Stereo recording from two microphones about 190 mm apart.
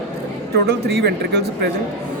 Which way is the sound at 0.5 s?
60° right (ahead or behind).